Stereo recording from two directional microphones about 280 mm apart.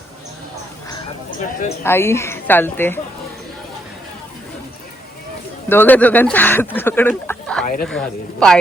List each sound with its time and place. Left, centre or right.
0.9 s a sound: centre
1.8 s a woman's voice: centre
5.6 s a woman's voice: centre
7.6 s speech: left
7.9 s speech: centre